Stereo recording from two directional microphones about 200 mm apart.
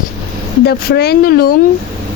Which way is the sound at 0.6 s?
55° left (ahead or behind).